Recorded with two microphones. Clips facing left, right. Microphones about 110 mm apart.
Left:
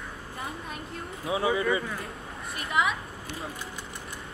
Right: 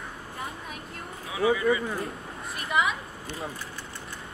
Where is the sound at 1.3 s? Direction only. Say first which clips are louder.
Right 2 dB; 30° left (ahead or behind).